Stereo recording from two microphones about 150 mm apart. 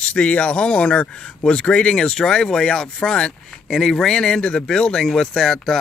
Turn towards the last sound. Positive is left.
turn(degrees=5)  # may be behind; listen again after turning